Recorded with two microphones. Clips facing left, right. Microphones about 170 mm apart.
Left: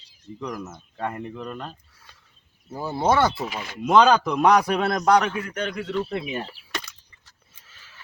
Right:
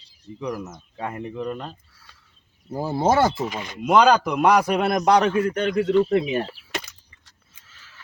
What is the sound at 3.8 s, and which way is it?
Speech, 10° right (ahead or behind).